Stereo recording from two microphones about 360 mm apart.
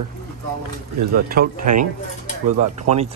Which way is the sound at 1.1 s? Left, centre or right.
Right.